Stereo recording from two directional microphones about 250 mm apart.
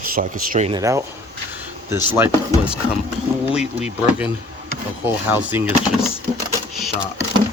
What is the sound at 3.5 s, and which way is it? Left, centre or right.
Speech, centre.